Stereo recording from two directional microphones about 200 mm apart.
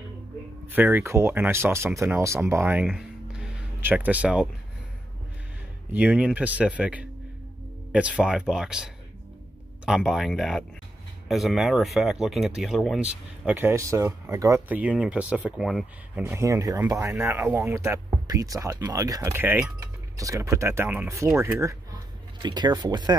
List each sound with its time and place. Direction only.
0.7 s speech: 10° right (ahead or behind)
5.9 s speech: 5° right (ahead or behind)
16.2 s speech: 10° right (ahead or behind)